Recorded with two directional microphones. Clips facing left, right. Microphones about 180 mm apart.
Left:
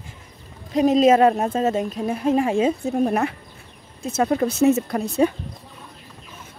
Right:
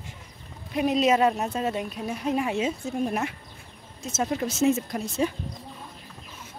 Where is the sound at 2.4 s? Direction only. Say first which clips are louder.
Left 7 dB; 40° left (ahead or behind).